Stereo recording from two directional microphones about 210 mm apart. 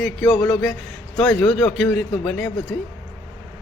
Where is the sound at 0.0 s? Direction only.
Centre (ahead or behind).